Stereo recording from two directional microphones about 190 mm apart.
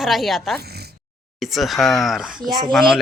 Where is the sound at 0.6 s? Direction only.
55° right (ahead or behind).